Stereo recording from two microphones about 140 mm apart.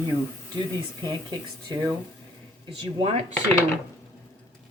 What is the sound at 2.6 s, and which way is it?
Speech, 50° right (ahead or behind).